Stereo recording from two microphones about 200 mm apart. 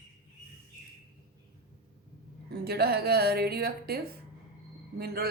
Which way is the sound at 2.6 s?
50° right (ahead or behind).